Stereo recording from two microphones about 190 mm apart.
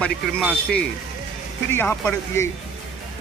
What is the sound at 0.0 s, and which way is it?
Speech, 5° left (ahead or behind).